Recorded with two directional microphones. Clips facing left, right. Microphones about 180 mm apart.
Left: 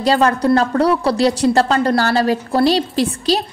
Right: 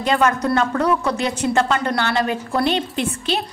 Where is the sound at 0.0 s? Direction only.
35° left (ahead or behind).